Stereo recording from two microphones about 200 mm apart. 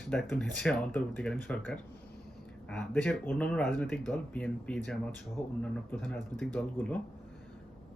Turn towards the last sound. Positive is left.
turn(degrees=5)  # may be behind; listen again after turning